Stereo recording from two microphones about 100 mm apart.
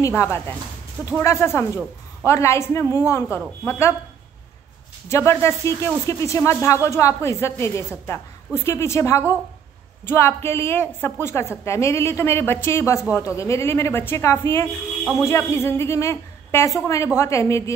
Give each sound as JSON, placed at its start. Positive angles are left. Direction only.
{"t": 0.0, "sound": "a woman's voice", "side_deg": 30}
{"t": 5.0, "sound": "a woman's voice", "side_deg": 25}